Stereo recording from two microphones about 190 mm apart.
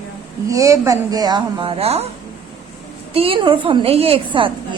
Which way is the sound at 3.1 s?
30° right (ahead or behind).